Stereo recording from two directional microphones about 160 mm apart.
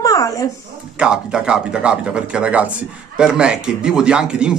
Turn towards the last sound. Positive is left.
turn(degrees=-5)  # may be behind; listen again after turning